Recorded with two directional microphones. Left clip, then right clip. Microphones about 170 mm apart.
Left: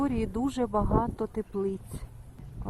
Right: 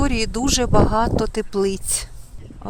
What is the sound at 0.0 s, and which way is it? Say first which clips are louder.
Speech: right 8 dB; 15° right (ahead or behind).